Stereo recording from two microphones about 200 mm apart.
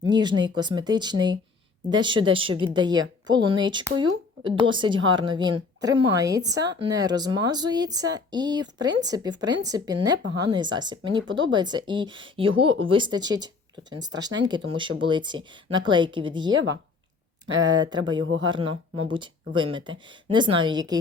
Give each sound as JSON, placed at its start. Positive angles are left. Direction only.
{"t": 0.0, "sound": "a woman's voice", "side_deg": -20}
{"t": 17.6, "sound": "a woman's voice", "side_deg": -20}